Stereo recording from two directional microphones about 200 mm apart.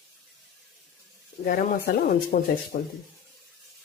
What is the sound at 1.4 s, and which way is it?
Speech, 45° left (ahead or behind).